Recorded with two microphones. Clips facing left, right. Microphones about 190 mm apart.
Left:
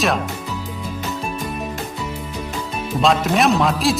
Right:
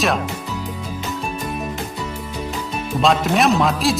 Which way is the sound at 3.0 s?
Centre (ahead or behind).